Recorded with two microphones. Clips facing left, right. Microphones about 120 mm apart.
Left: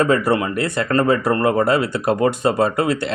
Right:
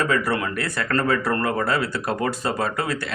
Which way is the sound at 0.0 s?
25° left (ahead or behind).